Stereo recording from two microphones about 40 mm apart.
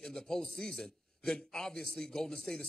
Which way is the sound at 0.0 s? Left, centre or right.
Centre.